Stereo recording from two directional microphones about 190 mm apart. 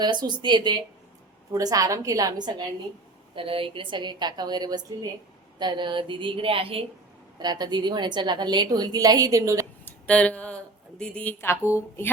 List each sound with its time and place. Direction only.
0.0 s a woman's voice: 25° right (ahead or behind)
9.8 s a sound: 5° left (ahead or behind)
11.6 s speech: 15° left (ahead or behind)